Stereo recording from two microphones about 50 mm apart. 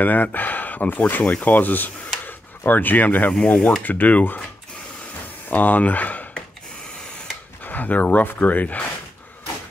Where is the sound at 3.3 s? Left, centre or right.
Left.